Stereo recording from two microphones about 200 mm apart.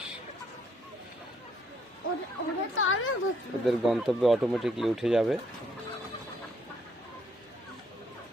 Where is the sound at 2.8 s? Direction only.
90° left.